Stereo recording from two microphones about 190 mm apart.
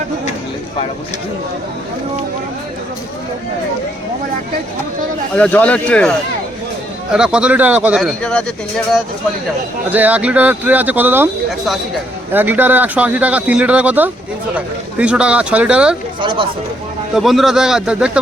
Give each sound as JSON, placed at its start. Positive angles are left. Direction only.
{"t": 5.3, "sound": "speech", "side_deg": 10}
{"t": 9.9, "sound": "speech", "side_deg": -10}
{"t": 12.3, "sound": "speech", "side_deg": -10}
{"t": 16.2, "sound": "speech", "side_deg": -25}
{"t": 17.2, "sound": "speech", "side_deg": 0}